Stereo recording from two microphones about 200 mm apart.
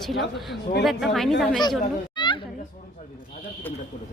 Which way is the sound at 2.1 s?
25° left (ahead or behind).